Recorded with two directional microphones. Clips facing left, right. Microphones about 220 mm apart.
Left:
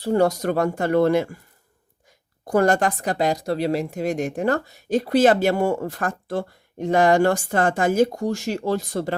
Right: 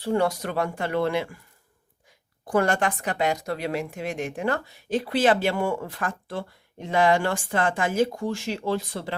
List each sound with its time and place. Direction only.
0.0 s a woman's voice: 40° left (ahead or behind)
2.5 s a woman's voice: 40° left (ahead or behind)